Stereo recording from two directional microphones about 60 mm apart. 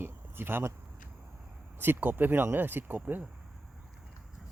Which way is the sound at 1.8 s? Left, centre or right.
Right.